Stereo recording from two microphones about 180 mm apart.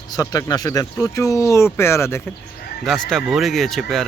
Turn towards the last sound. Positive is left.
turn(degrees=0)  # may be behind; listen again after turning